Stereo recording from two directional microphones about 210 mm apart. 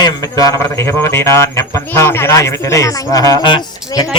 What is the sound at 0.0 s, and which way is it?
Speech, 15° left (ahead or behind).